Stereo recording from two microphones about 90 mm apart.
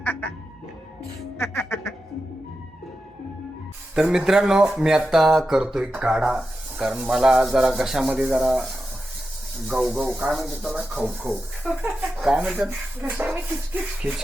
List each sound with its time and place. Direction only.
0.0 s music: 20° left (ahead or behind)
1.4 s quack: 30° left (ahead or behind)
3.9 s speech: 5° right (ahead or behind)
9.8 s speech: centre (ahead or behind)
11.7 s a sound: 20° right (ahead or behind)
12.2 s speech: 10° right (ahead or behind)
13.0 s a sound: 20° right (ahead or behind)